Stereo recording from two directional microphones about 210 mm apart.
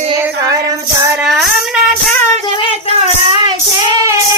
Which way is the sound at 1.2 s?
5° right (ahead or behind).